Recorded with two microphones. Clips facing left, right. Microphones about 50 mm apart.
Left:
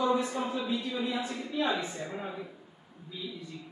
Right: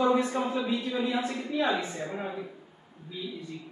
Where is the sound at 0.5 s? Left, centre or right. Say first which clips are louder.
Right 3 dB; right.